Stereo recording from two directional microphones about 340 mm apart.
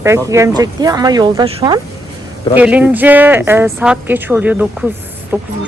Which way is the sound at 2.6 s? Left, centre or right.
Centre.